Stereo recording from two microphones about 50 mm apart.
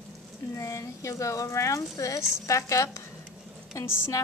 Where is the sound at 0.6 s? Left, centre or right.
Left.